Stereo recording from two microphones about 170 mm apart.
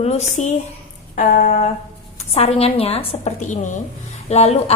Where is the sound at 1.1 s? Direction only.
55° left (ahead or behind).